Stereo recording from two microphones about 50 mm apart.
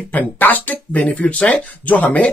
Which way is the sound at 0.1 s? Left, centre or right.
Left.